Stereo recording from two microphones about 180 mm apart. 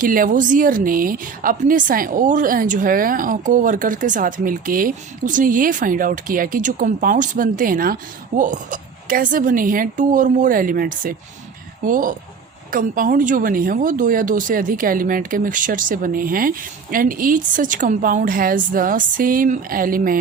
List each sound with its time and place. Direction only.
0.0 s speech: 50° right (ahead or behind)